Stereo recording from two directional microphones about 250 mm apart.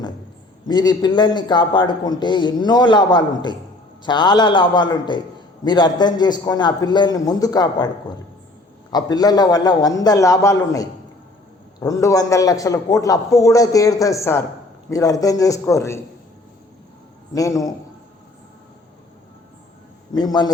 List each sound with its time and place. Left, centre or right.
0.7 s a man's voice: centre
8.9 s a man's voice: centre
17.3 s a man's voice: centre
20.1 s a man's voice: centre